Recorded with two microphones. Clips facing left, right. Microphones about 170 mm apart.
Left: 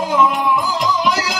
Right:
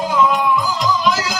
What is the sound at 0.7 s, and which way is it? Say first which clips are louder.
Music: even; 65° left (ahead or behind).